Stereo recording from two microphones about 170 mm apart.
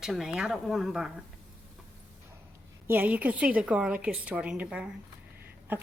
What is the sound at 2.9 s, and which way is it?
A woman's voice, 10° right (ahead or behind).